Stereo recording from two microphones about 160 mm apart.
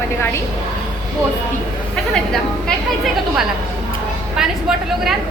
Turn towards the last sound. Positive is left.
turn(degrees=-5)  # may be behind; listen again after turning